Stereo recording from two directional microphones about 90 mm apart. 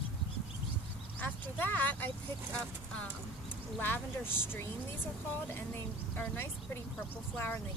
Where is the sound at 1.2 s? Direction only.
20° left (ahead or behind).